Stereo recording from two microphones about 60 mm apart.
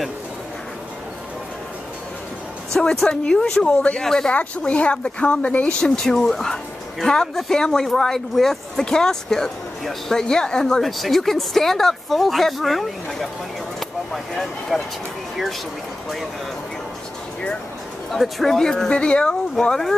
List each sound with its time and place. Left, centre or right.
2.7 s speech: centre
4.3 s speech: left; by 14.8 s centre
18.1 s speech: centre